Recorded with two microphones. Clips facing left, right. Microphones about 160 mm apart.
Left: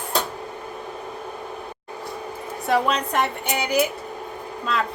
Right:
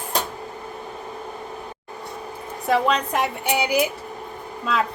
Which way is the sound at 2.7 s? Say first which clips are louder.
Right 1 dB; centre (ahead or behind).